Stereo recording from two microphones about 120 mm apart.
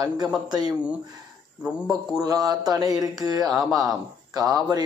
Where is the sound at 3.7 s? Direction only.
30° right (ahead or behind).